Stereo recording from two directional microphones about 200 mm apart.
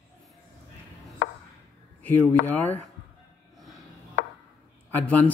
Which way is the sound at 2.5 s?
10° left (ahead or behind).